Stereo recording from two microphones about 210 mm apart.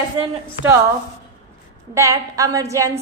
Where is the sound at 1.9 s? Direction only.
15° right (ahead or behind).